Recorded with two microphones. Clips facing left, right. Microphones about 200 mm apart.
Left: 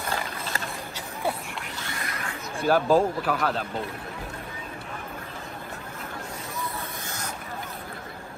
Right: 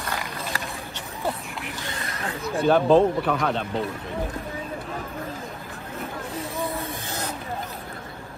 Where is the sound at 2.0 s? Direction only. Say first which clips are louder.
Right 4 dB; 30° right (ahead or behind).